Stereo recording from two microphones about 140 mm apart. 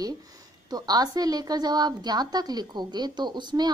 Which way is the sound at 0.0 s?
30° right (ahead or behind).